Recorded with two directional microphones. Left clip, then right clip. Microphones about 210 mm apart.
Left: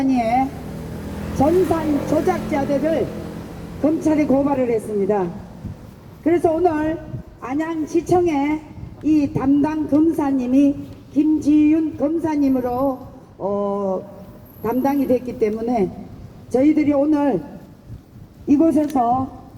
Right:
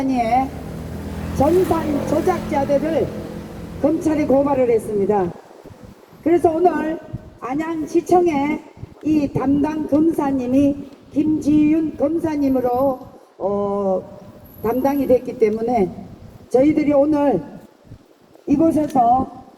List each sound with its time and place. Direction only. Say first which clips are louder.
0.1 s speech: right 2 dB; 10° right (ahead or behind)
1.5 s speech: even; 55° right (ahead or behind)
2.2 s speech: right 1 dB; 10° right (ahead or behind)
6.2 s speech: right 1 dB; 10° right (ahead or behind)
18.4 s speech: left 1 dB; 10° right (ahead or behind)